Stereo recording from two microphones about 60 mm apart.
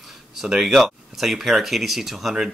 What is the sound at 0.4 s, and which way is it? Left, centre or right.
Speech, centre.